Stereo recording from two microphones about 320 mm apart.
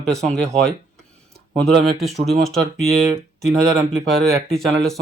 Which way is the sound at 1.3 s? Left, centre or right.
Centre.